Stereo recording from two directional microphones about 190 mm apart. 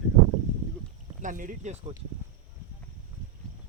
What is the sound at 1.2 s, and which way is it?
Speech, 45° right (ahead or behind).